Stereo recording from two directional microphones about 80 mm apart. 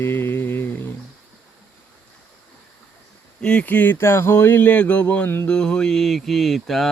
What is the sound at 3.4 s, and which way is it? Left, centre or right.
Speech, centre.